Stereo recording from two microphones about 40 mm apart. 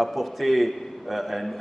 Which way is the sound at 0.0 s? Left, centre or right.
Centre.